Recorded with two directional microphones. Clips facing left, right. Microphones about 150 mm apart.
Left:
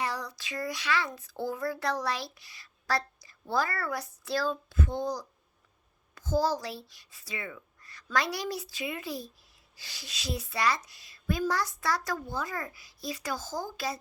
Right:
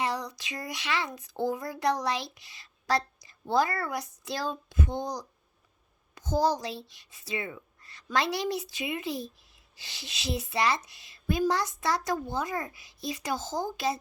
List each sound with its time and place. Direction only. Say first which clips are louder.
0.0 s a child's voice: right 3 dB; 20° right (ahead or behind)